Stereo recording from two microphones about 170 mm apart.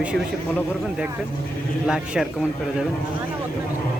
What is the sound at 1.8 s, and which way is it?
Speech, 5° right (ahead or behind).